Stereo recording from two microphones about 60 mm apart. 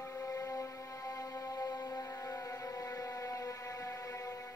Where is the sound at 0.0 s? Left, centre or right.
Left.